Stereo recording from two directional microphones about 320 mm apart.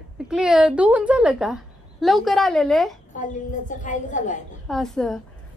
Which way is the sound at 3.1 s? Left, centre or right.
Left.